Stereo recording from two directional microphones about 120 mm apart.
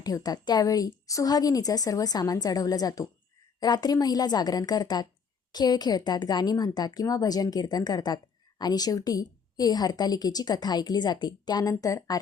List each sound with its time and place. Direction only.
0.0 s a woman's voice: 30° left (ahead or behind)